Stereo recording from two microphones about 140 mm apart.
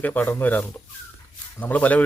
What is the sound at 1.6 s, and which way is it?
Speech, 10° left (ahead or behind).